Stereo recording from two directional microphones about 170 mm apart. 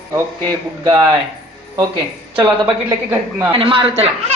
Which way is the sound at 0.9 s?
25° right (ahead or behind).